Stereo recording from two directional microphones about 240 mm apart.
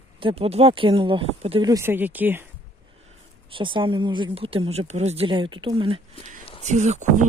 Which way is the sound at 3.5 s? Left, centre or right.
Right.